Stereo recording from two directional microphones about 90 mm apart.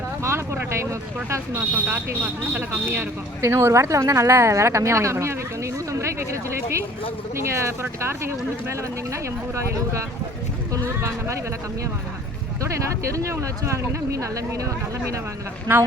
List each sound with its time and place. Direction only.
0.3 s vehicle: 30° right (ahead or behind)
1.3 s speech: 20° right (ahead or behind)
5.9 s a sound: 30° right (ahead or behind)
7.3 s speech: 30° right (ahead or behind)
9.6 s speech: 35° right (ahead or behind)
12.6 s speech: 35° right (ahead or behind)
15.7 s speech: 20° right (ahead or behind)